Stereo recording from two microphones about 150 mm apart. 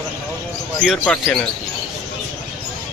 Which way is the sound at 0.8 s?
5° left (ahead or behind).